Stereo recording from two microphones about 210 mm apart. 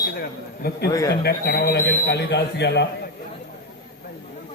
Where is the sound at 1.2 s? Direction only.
50° left (ahead or behind).